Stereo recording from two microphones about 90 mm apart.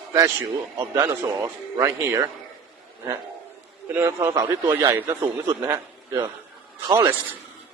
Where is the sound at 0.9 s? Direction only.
30° right (ahead or behind).